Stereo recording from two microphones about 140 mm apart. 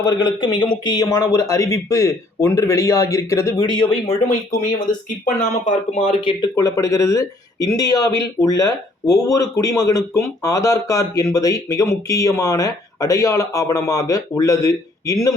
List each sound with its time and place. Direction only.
0.0 s speech: 30° left (ahead or behind)
3.8 s speech: 50° left (ahead or behind)
6.6 s speech: 25° left (ahead or behind)